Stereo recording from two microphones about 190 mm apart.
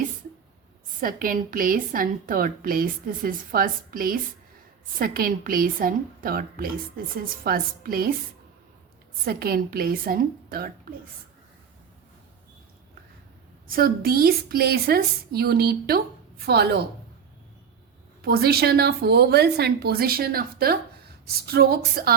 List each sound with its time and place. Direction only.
1.0 s a woman's voice: 50° right (ahead or behind)
9.2 s a woman's voice: 50° right (ahead or behind)
13.7 s a woman's voice: 50° right (ahead or behind)
18.2 s a woman's voice: 55° right (ahead or behind)